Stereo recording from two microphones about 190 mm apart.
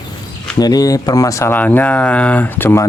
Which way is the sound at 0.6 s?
20° left (ahead or behind).